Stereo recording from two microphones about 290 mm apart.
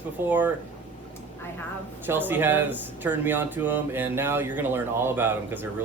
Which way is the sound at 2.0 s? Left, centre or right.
Centre.